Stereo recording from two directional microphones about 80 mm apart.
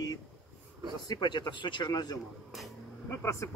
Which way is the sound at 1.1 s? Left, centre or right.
Left.